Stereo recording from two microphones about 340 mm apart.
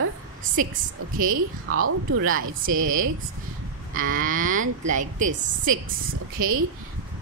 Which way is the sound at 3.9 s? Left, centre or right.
Right.